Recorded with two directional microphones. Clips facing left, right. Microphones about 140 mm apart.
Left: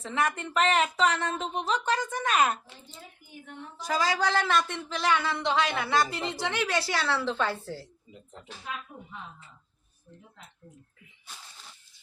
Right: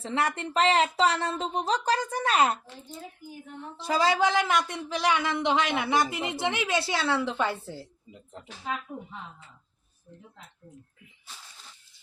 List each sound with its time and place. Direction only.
0.0 s speech: 30° right (ahead or behind)
3.8 s speech: 25° right (ahead or behind)